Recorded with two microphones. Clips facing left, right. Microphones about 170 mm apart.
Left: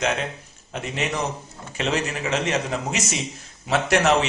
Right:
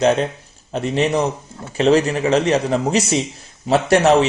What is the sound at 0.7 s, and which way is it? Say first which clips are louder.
A man's voice: right 9 dB; 35° right (ahead or behind).